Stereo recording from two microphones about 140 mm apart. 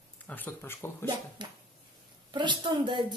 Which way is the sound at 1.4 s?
35° right (ahead or behind).